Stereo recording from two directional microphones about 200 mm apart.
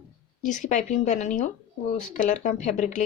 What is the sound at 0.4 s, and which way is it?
A woman's voice, 40° left (ahead or behind).